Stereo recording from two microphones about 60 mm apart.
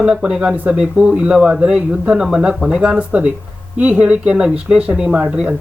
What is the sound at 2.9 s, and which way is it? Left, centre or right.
Speech, right.